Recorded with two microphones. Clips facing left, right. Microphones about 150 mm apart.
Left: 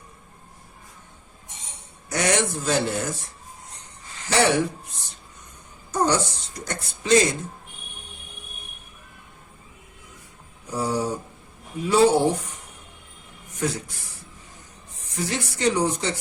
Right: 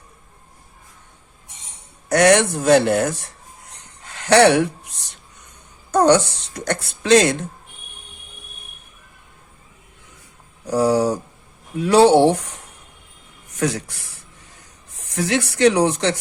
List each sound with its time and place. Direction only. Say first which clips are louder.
2.0 s speech: right 9 dB; 65° right (ahead or behind)
4.0 s a sound: right 8 dB; 70° right (ahead or behind)
5.9 s speech: right 8 dB; 70° right (ahead or behind)
10.7 s speech: right 8 dB; 80° right
13.6 s speech: right 5 dB; 75° right (ahead or behind)
15.1 s speech: right 7 dB; 75° right (ahead or behind)